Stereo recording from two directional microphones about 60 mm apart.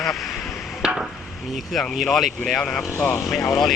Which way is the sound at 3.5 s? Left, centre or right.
Centre.